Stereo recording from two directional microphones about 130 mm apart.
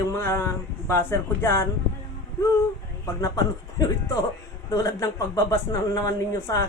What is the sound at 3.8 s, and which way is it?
A man's voice, 25° left (ahead or behind).